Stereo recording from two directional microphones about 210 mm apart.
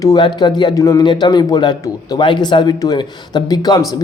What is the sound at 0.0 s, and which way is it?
Speech, 20° left (ahead or behind).